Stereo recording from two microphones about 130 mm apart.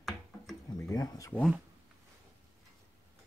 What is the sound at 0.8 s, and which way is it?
Speech, 30° left (ahead or behind).